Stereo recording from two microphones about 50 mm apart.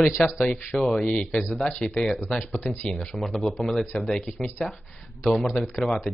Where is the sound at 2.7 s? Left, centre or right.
Centre.